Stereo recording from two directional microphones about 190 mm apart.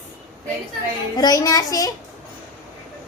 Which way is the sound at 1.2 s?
20° left (ahead or behind).